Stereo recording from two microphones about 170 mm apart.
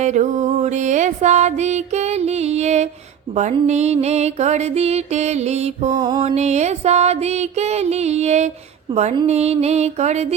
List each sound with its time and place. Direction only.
0.0 s music: 45° right (ahead or behind)
6.0 s music: 25° right (ahead or behind)